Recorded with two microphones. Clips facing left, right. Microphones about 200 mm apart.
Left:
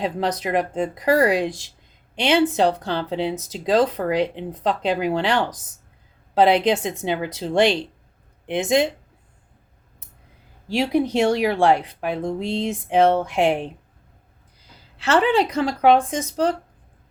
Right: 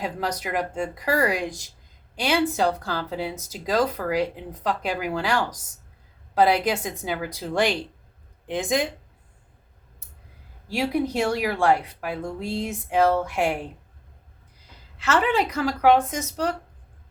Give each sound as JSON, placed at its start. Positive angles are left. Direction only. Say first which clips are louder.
{"t": 0.0, "sound": "speech", "louder": "left 5 dB", "side_deg": 30}
{"t": 1.5, "sound": "speech", "louder": "left 5 dB", "side_deg": 90}
{"t": 2.1, "sound": "speech", "louder": "left 4 dB", "side_deg": 25}
{"t": 10.7, "sound": "speech", "louder": "left 4 dB", "side_deg": 30}
{"t": 14.9, "sound": "speech", "louder": "left 4 dB", "side_deg": 35}